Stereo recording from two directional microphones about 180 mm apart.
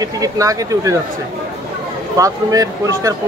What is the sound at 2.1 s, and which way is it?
Speech, 20° right (ahead or behind).